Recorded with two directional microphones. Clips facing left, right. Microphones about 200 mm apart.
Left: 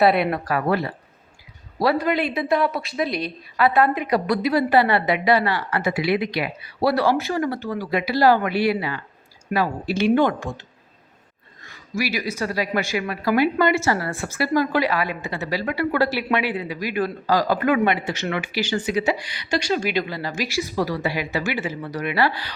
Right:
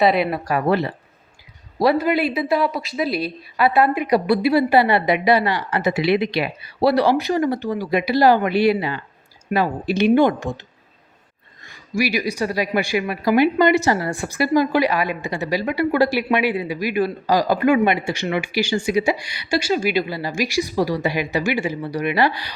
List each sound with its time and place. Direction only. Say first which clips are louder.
0.0 s a woman's voice: even; centre (ahead or behind)
0.5 s speech: right 4 dB; 20° right (ahead or behind)
2.0 s a woman's voice: right 3 dB; 5° right (ahead or behind)